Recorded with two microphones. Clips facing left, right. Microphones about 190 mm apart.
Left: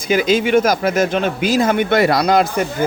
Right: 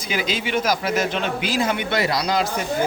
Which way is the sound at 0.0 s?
50° left (ahead or behind).